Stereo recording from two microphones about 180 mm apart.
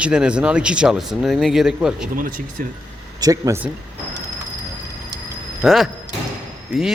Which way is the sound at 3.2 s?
20° right (ahead or behind).